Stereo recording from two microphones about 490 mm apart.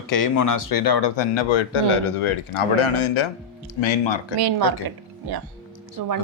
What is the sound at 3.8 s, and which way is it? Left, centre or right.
Speech, left.